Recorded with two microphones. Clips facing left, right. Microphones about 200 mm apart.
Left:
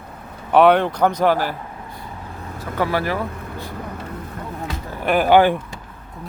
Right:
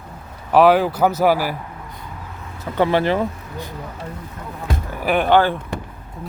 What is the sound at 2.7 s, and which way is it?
Speech, 25° right (ahead or behind).